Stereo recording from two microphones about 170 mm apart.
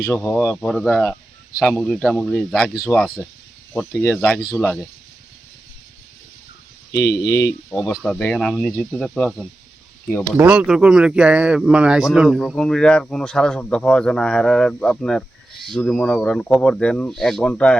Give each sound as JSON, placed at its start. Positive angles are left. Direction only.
{"t": 0.1, "sound": "speech", "side_deg": 15}
{"t": 0.4, "sound": "speech", "side_deg": 0}
{"t": 7.3, "sound": "speech", "side_deg": 20}
{"t": 8.1, "sound": "speech", "side_deg": 5}